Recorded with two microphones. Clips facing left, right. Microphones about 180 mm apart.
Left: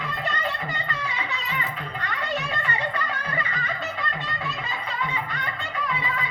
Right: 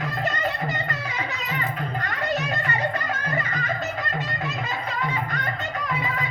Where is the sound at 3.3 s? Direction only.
45° right (ahead or behind).